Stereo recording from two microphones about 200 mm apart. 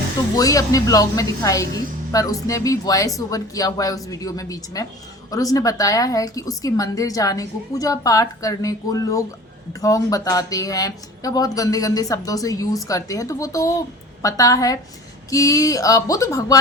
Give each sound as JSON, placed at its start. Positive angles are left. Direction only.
{"t": 0.3, "sound": "speech", "side_deg": 15}